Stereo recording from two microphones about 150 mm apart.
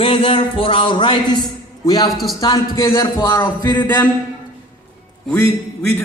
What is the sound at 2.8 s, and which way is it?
A man's voice, 25° left (ahead or behind).